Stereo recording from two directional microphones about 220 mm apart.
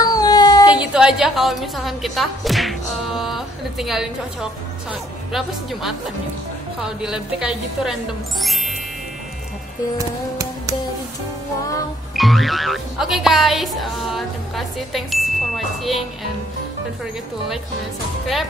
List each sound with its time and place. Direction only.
0.0 s a sound: 15° left (ahead or behind)
0.7 s a woman's voice: 5° right (ahead or behind)
9.9 s music: 15° right (ahead or behind)
12.2 s speech: centre (ahead or behind)
18.2 s speech: centre (ahead or behind)